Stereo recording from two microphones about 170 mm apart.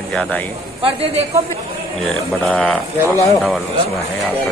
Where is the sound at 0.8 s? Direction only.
40° right (ahead or behind).